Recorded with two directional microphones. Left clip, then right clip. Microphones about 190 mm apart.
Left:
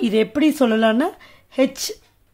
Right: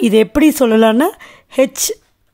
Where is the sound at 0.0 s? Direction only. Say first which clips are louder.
Right 7 dB; 40° right (ahead or behind).